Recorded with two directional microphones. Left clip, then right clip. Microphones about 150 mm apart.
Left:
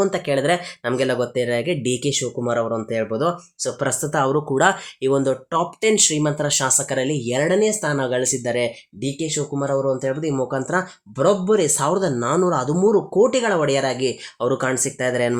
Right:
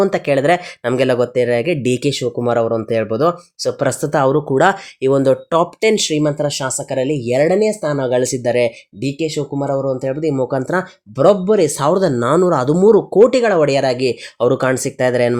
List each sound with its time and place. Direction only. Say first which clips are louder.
0.0 s speech: right 5 dB; 40° right (ahead or behind)